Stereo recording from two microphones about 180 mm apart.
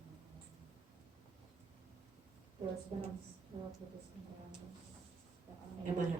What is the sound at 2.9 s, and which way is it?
Speech, 30° right (ahead or behind).